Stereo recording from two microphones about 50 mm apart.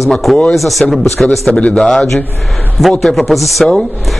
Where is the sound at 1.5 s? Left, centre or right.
Left.